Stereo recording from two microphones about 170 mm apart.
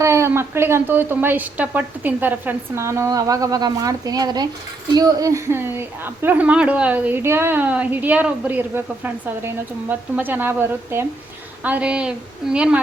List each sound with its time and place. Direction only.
0.0 s a woman's voice: 15° right (ahead or behind)